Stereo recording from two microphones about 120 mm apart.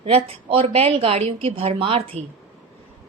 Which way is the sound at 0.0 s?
50° right (ahead or behind).